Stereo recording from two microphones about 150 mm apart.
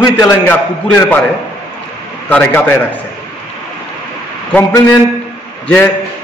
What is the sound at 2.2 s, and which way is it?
Speech, 10° left (ahead or behind).